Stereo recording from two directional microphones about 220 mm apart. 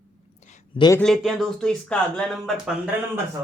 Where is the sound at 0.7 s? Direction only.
20° left (ahead or behind).